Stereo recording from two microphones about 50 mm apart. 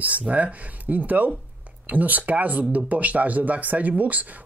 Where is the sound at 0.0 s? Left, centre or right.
Right.